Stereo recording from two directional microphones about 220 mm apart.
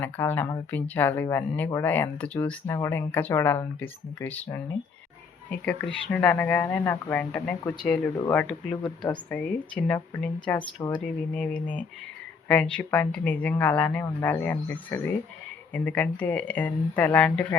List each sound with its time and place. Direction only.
0.0 s speech: 10° left (ahead or behind)
5.5 s speech: 5° left (ahead or behind)
10.6 s a woman's voice: 20° left (ahead or behind)
11.3 s speech: 5° left (ahead or behind)